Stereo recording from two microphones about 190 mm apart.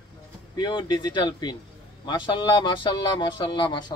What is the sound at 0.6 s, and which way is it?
Speech, 25° left (ahead or behind).